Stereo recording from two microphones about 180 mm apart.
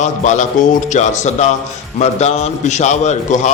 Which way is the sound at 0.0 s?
40° left (ahead or behind).